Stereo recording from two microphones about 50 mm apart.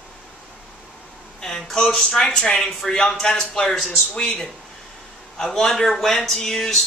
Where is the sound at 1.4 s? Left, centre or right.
Centre.